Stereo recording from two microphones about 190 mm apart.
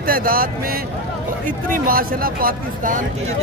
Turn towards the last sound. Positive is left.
turn(degrees=-45)  # may be behind; listen again after turning